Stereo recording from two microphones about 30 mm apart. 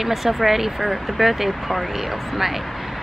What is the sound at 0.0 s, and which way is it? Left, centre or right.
Speech, centre.